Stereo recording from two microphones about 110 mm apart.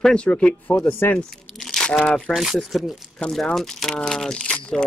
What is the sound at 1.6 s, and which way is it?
Crunch, 5° left (ahead or behind).